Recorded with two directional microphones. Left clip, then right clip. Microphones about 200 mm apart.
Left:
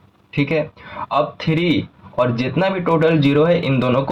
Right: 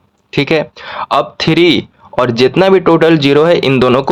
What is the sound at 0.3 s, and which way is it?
Speech, 50° right (ahead or behind).